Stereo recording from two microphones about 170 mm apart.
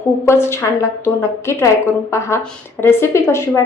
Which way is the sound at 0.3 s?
15° left (ahead or behind).